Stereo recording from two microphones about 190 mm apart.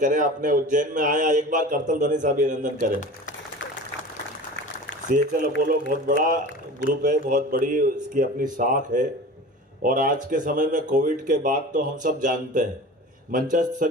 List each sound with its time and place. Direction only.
0.0 s speech: 45° right (ahead or behind)
5.0 s speech: 45° right (ahead or behind)